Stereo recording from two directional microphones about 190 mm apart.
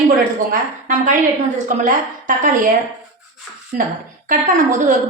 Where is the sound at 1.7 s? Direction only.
45° right (ahead or behind).